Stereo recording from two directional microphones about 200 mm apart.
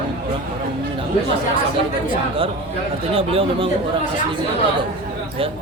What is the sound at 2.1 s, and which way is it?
A man's voice, 25° right (ahead or behind).